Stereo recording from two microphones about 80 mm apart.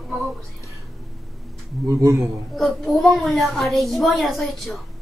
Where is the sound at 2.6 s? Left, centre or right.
Centre.